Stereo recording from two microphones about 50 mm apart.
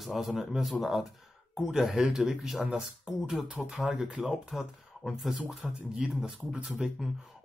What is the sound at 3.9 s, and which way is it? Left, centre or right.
Speech, right.